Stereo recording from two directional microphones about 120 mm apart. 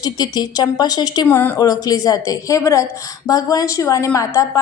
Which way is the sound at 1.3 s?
15° left (ahead or behind).